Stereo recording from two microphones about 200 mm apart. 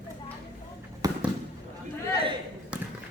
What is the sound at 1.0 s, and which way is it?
Fireworks, 20° right (ahead or behind).